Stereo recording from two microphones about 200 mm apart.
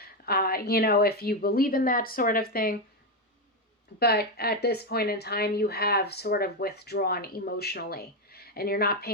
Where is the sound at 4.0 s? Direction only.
50° left (ahead or behind).